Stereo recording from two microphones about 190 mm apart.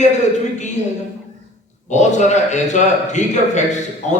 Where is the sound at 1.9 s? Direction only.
40° left (ahead or behind).